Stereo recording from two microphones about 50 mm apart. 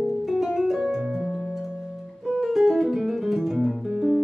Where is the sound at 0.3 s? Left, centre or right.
Centre.